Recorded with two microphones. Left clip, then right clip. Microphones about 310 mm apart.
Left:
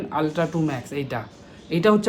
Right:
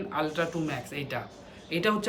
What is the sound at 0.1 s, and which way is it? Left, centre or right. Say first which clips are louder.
A man's voice: left 6 dB; centre.